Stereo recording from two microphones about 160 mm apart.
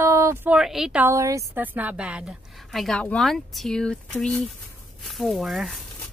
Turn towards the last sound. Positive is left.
turn(degrees=0)  # may be behind; listen again after turning